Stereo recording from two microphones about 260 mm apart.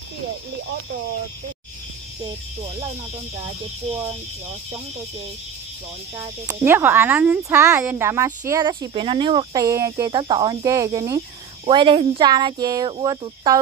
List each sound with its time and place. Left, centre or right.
6.1 s speech: centre